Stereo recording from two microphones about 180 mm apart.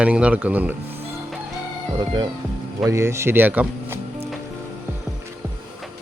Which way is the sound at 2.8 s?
15° right (ahead or behind).